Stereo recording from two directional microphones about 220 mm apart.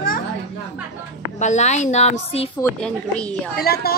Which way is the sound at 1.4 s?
30° left (ahead or behind).